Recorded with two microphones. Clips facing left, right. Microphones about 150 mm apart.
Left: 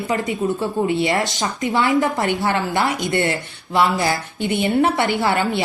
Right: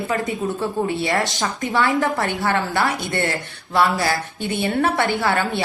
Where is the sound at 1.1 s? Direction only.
20° left (ahead or behind).